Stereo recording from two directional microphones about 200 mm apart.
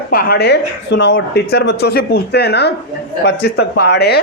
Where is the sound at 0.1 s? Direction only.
50° left (ahead or behind).